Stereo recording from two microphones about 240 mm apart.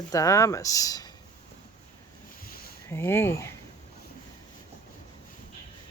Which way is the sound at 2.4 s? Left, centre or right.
Left.